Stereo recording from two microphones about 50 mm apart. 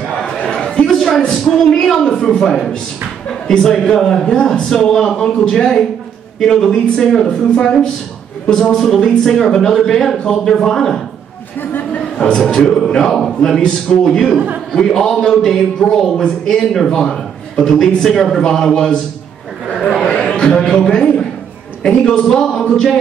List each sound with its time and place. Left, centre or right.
0.5 s a sound: centre
3.3 s a man's voice: centre
12.2 s a man's voice: centre
20.2 s a man's voice: centre